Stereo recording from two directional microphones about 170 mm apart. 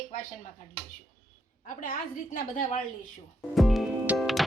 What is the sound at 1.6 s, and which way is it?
A woman's voice, 50° left (ahead or behind).